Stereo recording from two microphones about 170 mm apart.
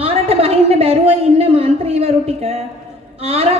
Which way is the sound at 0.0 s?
35° right (ahead or behind).